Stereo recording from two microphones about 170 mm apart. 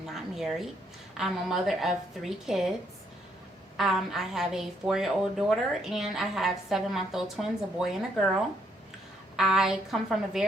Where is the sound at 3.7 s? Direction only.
Centre (ahead or behind).